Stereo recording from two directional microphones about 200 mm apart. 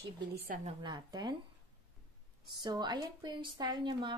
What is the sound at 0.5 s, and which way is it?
Speech, 40° right (ahead or behind).